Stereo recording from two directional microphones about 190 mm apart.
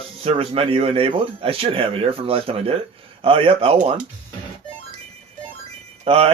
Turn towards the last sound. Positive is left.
turn(degrees=-30)  # may be behind; listen again after turning